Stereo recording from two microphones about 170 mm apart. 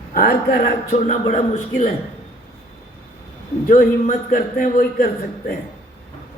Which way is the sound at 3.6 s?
50° left (ahead or behind).